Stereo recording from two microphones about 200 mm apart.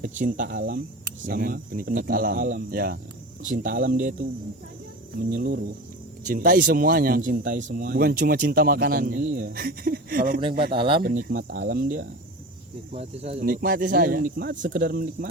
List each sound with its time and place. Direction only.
0.2 s speech: 40° right (ahead or behind)
5.3 s speech: 45° right (ahead or behind)
10.7 s speech: 25° right (ahead or behind)
11.0 s speech: 45° right (ahead or behind)
12.9 s speech: 30° right (ahead or behind)
13.4 s speech: 45° right (ahead or behind)